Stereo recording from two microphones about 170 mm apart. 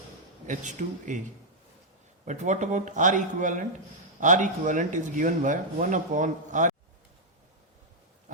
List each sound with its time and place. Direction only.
0.4 s speech: 45° right (ahead or behind)
2.2 s speech: 45° right (ahead or behind)